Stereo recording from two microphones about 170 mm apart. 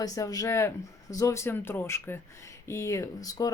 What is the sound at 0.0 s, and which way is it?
Speech, 20° left (ahead or behind).